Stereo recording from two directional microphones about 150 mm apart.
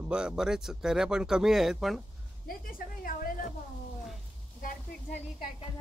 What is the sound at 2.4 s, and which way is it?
Speech, 70° left (ahead or behind).